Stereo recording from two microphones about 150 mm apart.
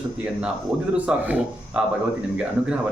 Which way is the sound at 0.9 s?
10° right (ahead or behind).